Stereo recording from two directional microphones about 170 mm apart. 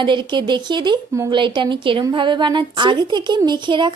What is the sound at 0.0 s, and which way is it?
A woman's voice, 30° right (ahead or behind).